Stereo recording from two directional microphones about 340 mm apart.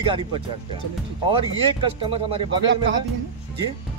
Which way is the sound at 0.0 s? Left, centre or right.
Centre.